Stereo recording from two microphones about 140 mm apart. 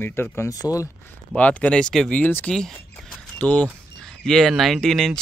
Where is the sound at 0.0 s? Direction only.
15° left (ahead or behind).